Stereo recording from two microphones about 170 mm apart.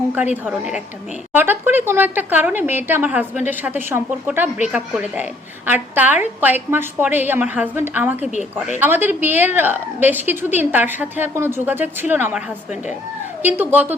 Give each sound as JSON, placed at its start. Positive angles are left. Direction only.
{"t": 0.4, "sound": "a woman's voice", "side_deg": -5}
{"t": 8.2, "sound": "a woman's voice", "side_deg": 45}
{"t": 8.8, "sound": "a woman's voice", "side_deg": -10}
{"t": 13.4, "sound": "a woman's voice", "side_deg": -10}